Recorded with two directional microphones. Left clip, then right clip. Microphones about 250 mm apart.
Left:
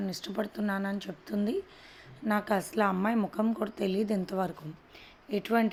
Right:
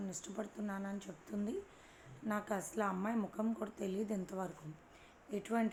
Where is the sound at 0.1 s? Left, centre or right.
Left.